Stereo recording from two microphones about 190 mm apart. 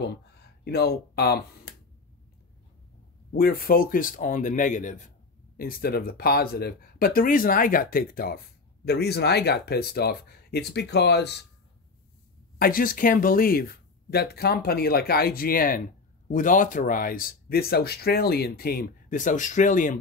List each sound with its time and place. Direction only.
0.0 s speech: 60° left (ahead or behind)
3.3 s speech: 50° left (ahead or behind)
5.6 s speech: 50° left (ahead or behind)
12.5 s speech: 50° left (ahead or behind)